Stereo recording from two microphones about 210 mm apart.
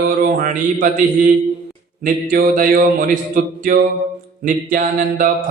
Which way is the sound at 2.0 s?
40° right (ahead or behind).